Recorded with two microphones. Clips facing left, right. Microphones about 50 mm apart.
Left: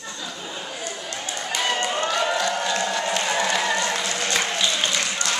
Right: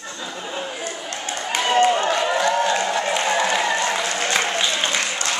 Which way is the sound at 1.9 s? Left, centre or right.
Right.